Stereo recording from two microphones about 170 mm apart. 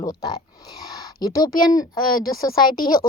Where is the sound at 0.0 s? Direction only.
25° left (ahead or behind).